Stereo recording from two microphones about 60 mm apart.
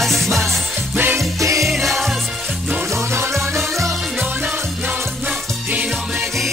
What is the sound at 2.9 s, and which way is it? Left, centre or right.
Music, right.